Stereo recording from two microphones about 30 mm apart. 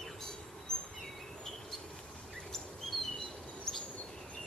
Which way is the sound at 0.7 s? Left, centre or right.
Centre.